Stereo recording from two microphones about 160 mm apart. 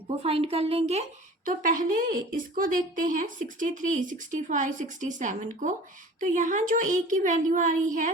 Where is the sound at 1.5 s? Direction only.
55° right (ahead or behind).